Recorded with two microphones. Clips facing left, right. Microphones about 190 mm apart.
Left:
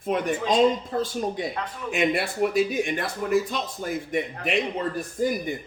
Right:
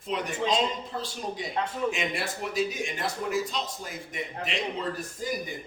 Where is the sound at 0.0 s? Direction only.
50° left (ahead or behind).